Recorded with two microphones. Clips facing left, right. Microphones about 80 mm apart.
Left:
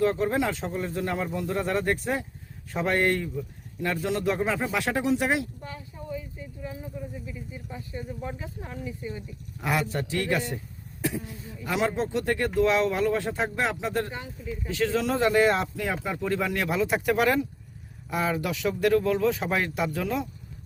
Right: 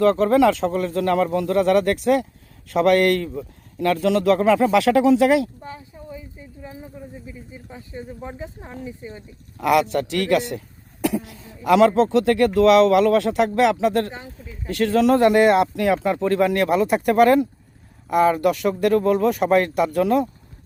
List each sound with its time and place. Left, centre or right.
0.0 s speech: right
5.6 s a sound: right
7.3 s speech: right
9.6 s a man's voice: right
14.1 s speech: right
14.7 s speech: right